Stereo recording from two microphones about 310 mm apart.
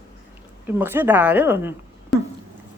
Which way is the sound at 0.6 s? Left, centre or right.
Centre.